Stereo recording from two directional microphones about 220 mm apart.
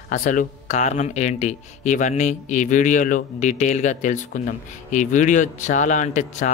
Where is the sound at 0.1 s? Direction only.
35° left (ahead or behind).